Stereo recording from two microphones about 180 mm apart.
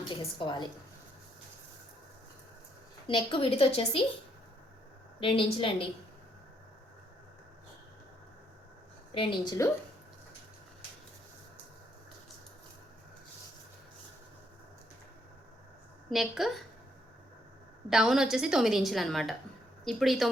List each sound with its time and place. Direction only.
0.1 s a woman's voice: 25° left (ahead or behind)
3.1 s a woman's voice: 30° left (ahead or behind)
5.2 s a woman's voice: 30° left (ahead or behind)
9.1 s a woman's voice: 25° left (ahead or behind)
16.0 s a woman's voice: centre (ahead or behind)
17.8 s a woman's voice: 5° right (ahead or behind)